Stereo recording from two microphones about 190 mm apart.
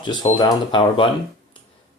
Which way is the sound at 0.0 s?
25° left (ahead or behind).